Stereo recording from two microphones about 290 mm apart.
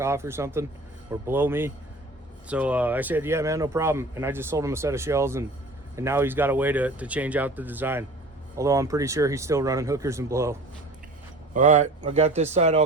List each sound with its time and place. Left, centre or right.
0.0 s speech: centre
11.5 s speech: right